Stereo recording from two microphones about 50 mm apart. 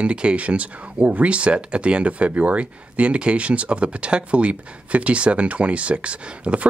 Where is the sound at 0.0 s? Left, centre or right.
Right.